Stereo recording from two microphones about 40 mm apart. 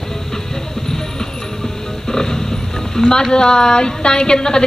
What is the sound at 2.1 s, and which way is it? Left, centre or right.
Vehicle, centre.